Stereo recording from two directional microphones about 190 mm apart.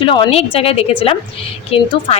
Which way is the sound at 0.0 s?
30° left (ahead or behind).